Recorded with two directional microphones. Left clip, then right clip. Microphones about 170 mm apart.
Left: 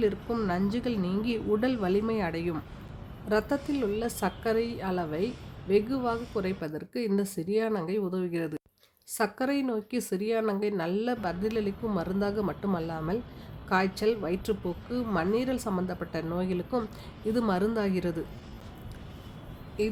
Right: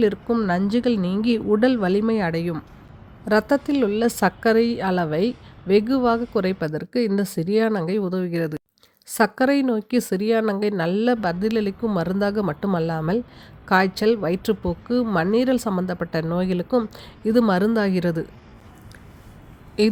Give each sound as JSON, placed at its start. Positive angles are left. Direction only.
{"t": 0.0, "sound": "speech", "side_deg": -35}
{"t": 19.8, "sound": "a woman's voice", "side_deg": -50}